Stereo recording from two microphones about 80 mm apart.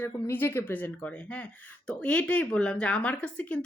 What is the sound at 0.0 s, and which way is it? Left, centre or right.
Speech, left.